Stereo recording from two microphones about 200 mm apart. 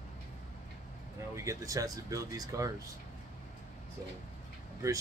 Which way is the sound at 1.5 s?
15° right (ahead or behind).